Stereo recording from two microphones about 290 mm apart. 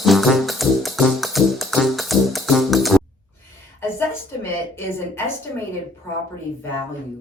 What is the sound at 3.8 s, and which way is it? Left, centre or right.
A woman's voice, centre.